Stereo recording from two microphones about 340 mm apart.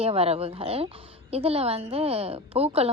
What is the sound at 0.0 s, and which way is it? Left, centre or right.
A woman's voice, centre.